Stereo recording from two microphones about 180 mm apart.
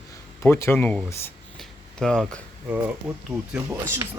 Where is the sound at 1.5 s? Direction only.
5° left (ahead or behind).